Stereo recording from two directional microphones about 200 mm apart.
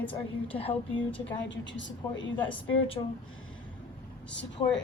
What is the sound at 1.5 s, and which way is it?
Speech, 70° left (ahead or behind).